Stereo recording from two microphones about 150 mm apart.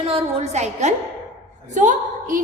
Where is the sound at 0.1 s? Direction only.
45° right (ahead or behind).